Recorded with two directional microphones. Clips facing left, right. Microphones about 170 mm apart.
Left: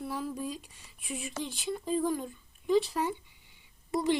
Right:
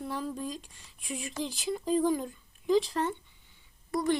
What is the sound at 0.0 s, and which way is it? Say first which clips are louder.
Speech: even; 5° left (ahead or behind).